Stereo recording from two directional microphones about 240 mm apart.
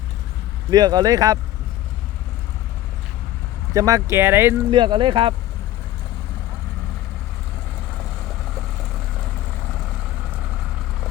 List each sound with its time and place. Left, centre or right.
0.7 s speech: centre
3.8 s speech: centre